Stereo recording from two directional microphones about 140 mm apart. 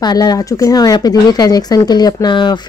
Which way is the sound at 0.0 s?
30° left (ahead or behind).